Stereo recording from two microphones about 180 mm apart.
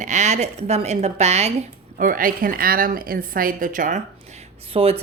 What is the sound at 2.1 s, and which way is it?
A woman's voice, 50° right (ahead or behind).